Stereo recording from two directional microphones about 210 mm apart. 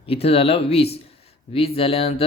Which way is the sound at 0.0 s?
30° left (ahead or behind).